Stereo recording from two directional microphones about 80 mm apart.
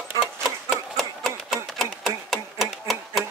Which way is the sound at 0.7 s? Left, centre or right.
Centre.